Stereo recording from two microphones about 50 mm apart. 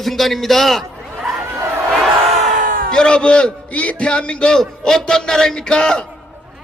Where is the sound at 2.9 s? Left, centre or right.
Centre.